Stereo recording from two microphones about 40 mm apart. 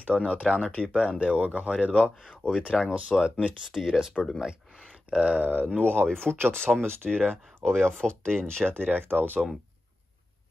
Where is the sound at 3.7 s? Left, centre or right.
Centre.